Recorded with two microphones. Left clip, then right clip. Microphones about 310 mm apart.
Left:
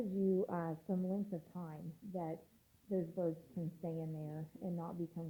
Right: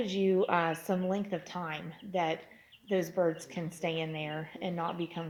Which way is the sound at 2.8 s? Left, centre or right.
Centre.